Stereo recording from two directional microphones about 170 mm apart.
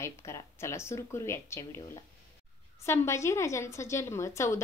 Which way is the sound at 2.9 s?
15° left (ahead or behind).